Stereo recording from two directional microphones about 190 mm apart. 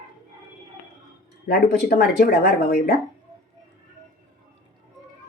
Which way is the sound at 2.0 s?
55° left (ahead or behind).